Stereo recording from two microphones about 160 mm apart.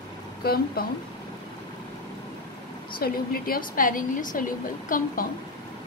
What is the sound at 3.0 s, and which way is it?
A woman's voice, 65° left (ahead or behind).